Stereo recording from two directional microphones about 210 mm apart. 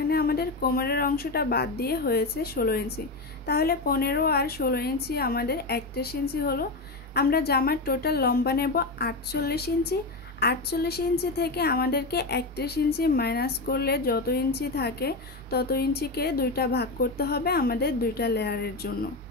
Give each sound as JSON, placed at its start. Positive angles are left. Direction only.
{"t": 0.1, "sound": "a woman's voice", "side_deg": 45}